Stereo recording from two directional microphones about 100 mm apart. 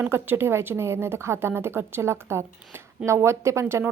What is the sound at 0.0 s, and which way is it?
Speech, 20° right (ahead or behind).